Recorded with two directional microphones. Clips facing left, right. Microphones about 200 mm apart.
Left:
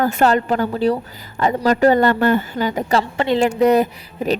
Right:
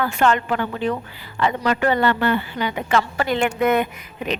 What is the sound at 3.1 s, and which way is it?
A woman's voice, 25° left (ahead or behind).